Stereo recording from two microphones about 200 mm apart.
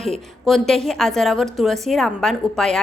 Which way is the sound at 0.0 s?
Centre (ahead or behind).